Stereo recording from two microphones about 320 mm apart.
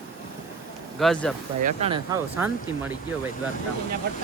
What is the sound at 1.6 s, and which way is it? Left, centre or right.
Speech, centre.